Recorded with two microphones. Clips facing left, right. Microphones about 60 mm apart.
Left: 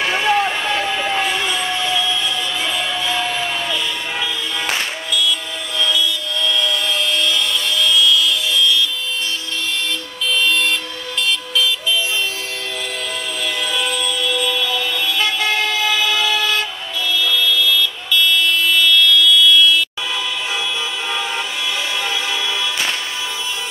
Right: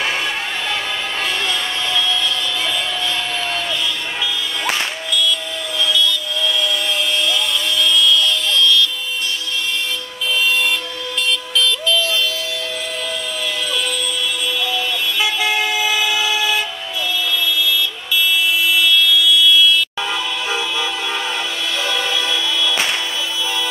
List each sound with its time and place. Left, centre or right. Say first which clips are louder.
0.1 s vehicle: left 6 dB; left
6.4 s music: left 1 dB; centre
7.2 s a sound: even; centre
14.4 s toot: left 1 dB; centre
17.2 s vehicle: left 3 dB; centre
22.1 s a sound: right 1 dB; left